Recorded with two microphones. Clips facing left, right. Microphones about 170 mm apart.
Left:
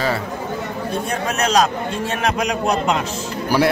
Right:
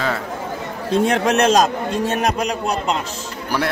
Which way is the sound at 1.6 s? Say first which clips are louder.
Right 2 dB; 40° right (ahead or behind).